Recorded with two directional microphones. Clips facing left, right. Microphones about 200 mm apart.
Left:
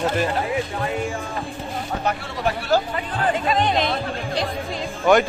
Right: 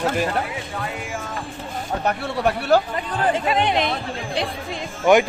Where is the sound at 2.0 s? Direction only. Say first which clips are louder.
Right 4 dB; 65° right (ahead or behind).